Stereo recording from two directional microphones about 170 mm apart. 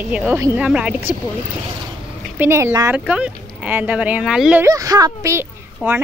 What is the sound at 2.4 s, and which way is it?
A woman's voice, 15° right (ahead or behind).